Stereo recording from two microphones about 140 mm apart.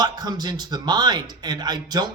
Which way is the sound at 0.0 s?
30° right (ahead or behind).